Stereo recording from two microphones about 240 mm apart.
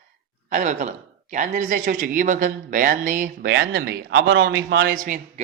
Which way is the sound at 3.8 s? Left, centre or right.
Right.